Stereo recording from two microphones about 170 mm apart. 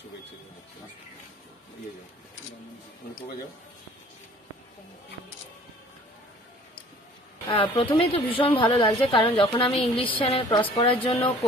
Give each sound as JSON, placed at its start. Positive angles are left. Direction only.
{"t": 7.4, "sound": "a woman's voice", "side_deg": 30}